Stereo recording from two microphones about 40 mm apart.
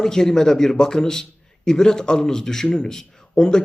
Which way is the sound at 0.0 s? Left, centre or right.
Centre.